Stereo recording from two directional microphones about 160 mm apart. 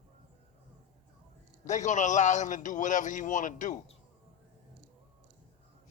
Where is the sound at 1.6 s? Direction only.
50° left (ahead or behind).